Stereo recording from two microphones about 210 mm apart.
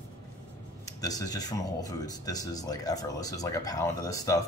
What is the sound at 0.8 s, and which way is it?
Speech, 15° left (ahead or behind).